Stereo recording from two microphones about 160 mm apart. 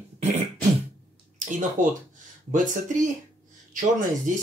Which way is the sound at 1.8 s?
55° right (ahead or behind).